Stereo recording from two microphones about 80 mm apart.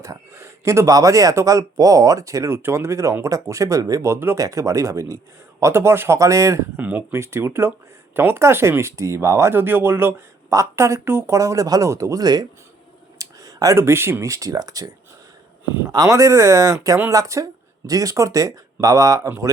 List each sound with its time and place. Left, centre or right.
0.0 s speech: right
4.4 s speech: right
6.7 s speech: right
11.3 s speech: right
12.2 s speech: right
13.1 s a sound: right
13.7 s speech: right
15.9 s speech: right